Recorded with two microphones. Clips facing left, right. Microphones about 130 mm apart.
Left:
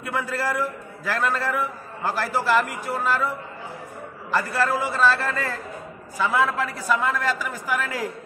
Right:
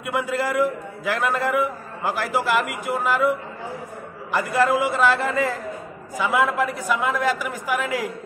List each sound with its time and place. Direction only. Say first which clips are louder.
0.0 s a man's voice: right 3 dB; 15° right (ahead or behind)